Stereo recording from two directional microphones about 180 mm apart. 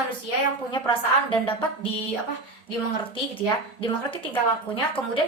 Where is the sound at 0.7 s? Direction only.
25° left (ahead or behind).